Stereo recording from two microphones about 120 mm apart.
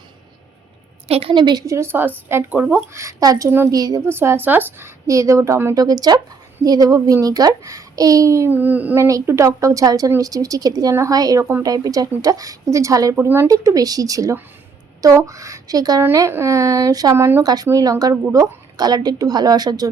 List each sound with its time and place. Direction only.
1.0 s a woman's voice: 55° right (ahead or behind)
1.6 s speech: 25° right (ahead or behind)
5.0 s speech: 25° right (ahead or behind)
8.5 s child singing: 15° right (ahead or behind)
9.0 s a woman's voice: 25° right (ahead or behind)
13.1 s child singing: 20° right (ahead or behind)
13.5 s speech: 30° right (ahead or behind)
17.4 s a woman's voice: 35° right (ahead or behind)